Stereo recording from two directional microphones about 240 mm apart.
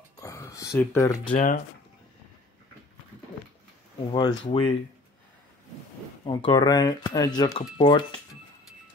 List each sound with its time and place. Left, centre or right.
0.2 s a sound: centre
1.3 s speech: left
4.1 s speech: centre
6.2 s speech: centre